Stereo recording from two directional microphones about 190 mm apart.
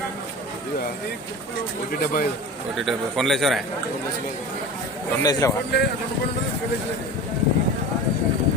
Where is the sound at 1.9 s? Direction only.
50° left (ahead or behind).